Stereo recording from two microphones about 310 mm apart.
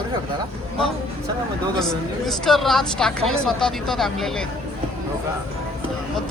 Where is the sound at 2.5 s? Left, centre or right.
Centre.